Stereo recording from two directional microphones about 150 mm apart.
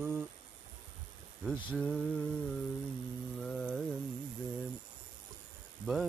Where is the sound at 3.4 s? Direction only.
5° left (ahead or behind).